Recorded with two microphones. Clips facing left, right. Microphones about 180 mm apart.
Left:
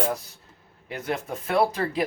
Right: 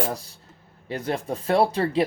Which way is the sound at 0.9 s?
35° right (ahead or behind).